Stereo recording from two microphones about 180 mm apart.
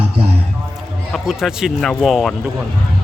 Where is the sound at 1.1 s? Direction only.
Centre (ahead or behind).